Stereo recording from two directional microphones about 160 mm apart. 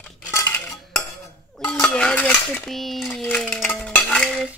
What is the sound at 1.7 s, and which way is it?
Dishes, 5° left (ahead or behind).